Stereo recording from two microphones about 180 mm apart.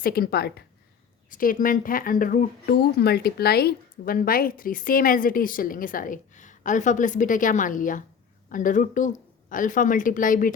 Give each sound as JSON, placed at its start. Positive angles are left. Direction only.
{"t": 0.0, "sound": "a woman's voice", "side_deg": 55}
{"t": 1.3, "sound": "speech", "side_deg": 50}